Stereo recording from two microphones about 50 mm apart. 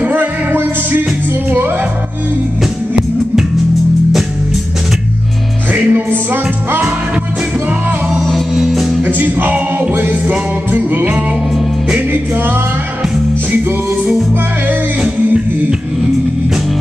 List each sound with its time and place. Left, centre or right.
0.0 s music: right
5.7 s music: right
8.2 s music: centre
9.0 s music: right